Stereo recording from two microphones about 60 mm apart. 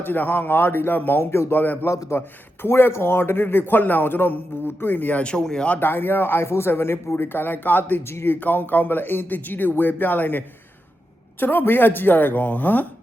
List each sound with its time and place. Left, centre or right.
0.0 s speech: left
1.2 s speech: left
1.9 s a man's voice: left
2.1 s speech: left; by 5.6 s centre
5.6 s speech: left
8.0 s speech: left
8.4 s speech: left